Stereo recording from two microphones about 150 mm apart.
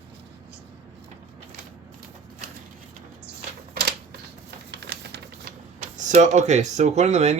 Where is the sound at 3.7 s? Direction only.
90° right.